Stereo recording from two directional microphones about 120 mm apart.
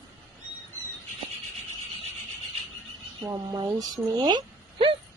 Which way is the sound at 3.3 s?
30° right (ahead or behind).